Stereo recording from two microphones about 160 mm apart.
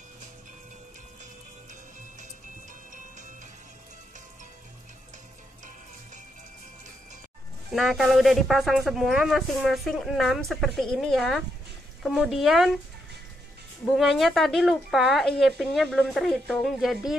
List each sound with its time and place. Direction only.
2.9 s music: 50° right (ahead or behind)
7.7 s speech: centre (ahead or behind)
13.9 s speech: centre (ahead or behind)